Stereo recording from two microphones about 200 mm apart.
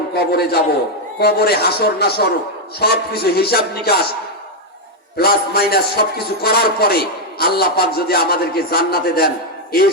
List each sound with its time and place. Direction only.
0.1 s a man's voice: 50° left (ahead or behind)
5.1 s a man's voice: 50° left (ahead or behind)